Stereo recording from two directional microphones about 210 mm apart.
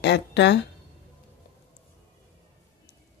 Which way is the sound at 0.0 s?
55° left (ahead or behind).